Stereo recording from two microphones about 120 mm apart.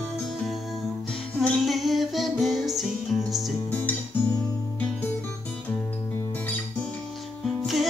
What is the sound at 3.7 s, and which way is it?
Guitar, 15° left (ahead or behind).